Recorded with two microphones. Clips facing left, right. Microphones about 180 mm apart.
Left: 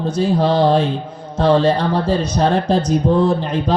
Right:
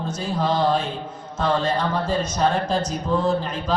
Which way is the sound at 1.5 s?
35° left (ahead or behind).